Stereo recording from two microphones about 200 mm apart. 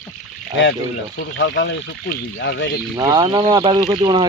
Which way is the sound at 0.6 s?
65° left (ahead or behind).